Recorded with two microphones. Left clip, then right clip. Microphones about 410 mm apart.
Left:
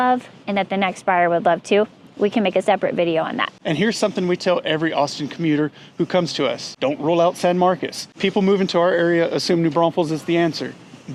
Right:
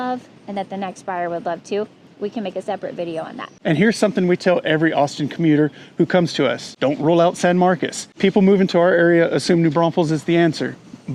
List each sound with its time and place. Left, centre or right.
0.0 s a woman's voice: left
3.6 s speech: right